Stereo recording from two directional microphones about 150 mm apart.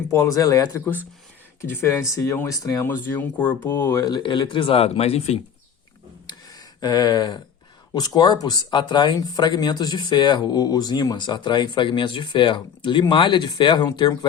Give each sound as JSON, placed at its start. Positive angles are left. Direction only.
{"t": 0.1, "sound": "speech", "side_deg": 20}
{"t": 6.2, "sound": "a sound", "side_deg": 25}
{"t": 7.9, "sound": "speech", "side_deg": 30}